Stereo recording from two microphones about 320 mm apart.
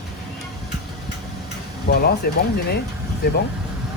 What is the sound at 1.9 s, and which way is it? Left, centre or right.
Air conditioning, left.